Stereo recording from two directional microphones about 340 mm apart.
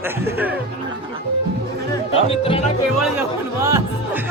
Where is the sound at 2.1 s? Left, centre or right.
Centre.